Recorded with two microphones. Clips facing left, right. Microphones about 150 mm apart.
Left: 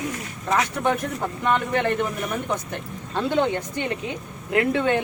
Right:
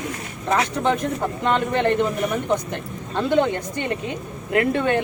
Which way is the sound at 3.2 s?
15° right (ahead or behind).